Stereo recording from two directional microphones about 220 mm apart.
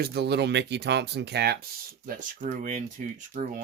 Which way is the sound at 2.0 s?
40° right (ahead or behind).